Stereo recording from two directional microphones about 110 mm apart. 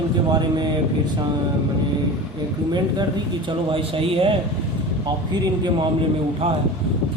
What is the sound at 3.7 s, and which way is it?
Speech, 55° right (ahead or behind).